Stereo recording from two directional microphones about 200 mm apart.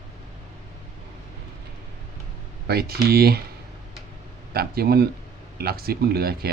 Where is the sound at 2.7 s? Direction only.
50° right (ahead or behind).